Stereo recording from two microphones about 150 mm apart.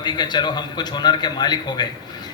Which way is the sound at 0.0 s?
30° left (ahead or behind).